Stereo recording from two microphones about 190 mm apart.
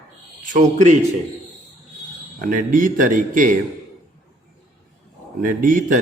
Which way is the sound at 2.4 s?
45° right (ahead or behind).